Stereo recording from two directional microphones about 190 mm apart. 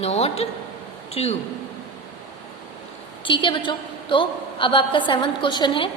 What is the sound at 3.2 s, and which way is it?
A woman's voice, 25° left (ahead or behind).